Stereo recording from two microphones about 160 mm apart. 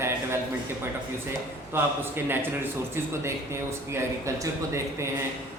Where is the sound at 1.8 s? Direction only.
10° right (ahead or behind).